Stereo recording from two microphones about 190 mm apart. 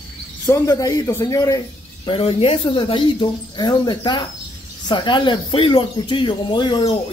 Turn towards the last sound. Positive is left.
turn(degrees=25)  # may be behind; listen again after turning